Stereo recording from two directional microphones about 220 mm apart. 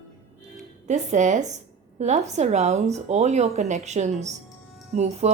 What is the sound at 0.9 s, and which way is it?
A woman's voice, 35° right (ahead or behind).